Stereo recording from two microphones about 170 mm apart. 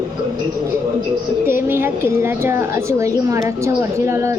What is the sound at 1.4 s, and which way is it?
A woman's voice, 15° right (ahead or behind).